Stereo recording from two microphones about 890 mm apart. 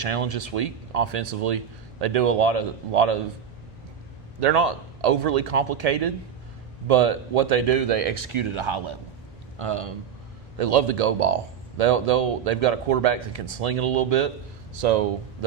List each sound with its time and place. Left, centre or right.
0.0 s speech: right
4.4 s speech: right